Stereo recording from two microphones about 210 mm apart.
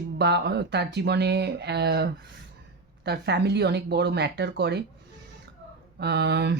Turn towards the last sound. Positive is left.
turn(degrees=-50)  # may be behind; listen again after turning